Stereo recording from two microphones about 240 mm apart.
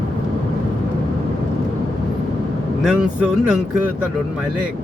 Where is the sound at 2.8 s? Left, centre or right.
Centre.